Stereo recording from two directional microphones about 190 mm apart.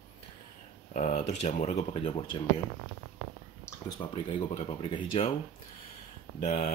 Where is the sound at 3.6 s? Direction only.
20° left (ahead or behind).